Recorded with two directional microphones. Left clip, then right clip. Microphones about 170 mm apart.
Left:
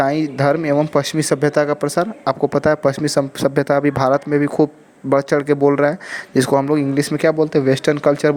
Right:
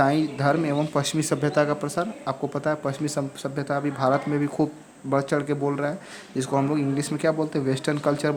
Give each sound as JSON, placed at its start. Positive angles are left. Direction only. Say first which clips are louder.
{"t": 0.0, "sound": "speech", "louder": "left 5 dB", "side_deg": 40}